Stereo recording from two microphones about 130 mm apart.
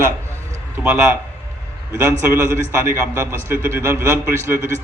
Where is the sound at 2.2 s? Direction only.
20° right (ahead or behind).